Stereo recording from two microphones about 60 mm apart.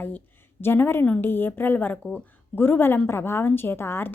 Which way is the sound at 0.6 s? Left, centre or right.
Left.